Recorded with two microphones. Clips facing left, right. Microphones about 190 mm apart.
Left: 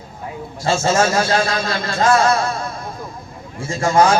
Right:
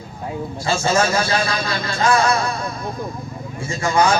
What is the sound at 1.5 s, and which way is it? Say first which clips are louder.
Speech: left 2 dB; 25° left (ahead or behind).